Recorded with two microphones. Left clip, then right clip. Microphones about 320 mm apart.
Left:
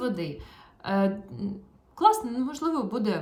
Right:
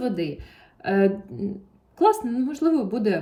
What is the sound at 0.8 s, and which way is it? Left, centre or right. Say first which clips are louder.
Speech: right 6 dB; left.